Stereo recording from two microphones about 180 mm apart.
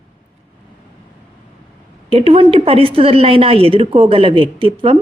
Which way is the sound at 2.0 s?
35° right (ahead or behind).